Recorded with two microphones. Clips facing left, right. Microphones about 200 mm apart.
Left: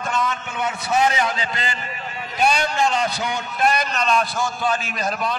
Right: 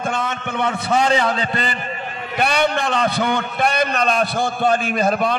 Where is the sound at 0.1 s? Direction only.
60° right (ahead or behind).